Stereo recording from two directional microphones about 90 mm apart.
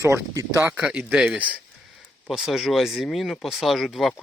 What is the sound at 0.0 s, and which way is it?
Speech, 30° right (ahead or behind).